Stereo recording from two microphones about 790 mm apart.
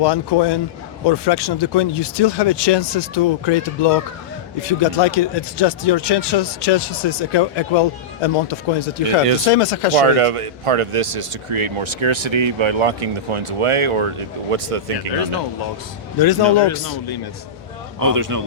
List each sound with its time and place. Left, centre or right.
0.0 s a man's voice: left
9.9 s speech: right
16.1 s a man's voice: left
18.0 s speech: right